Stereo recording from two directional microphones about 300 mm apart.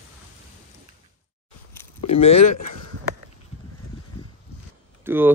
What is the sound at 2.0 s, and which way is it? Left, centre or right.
Speech, left.